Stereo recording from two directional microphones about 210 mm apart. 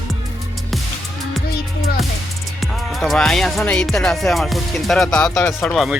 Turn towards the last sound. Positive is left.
turn(degrees=0)  # may be behind; listen again after turning